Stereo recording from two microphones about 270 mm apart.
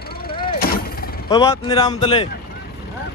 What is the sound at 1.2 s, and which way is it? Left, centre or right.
A man's voice, centre.